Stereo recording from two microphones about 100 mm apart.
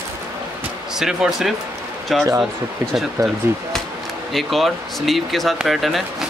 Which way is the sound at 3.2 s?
35° right (ahead or behind).